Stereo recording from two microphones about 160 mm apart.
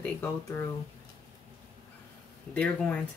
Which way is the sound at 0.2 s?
15° left (ahead or behind).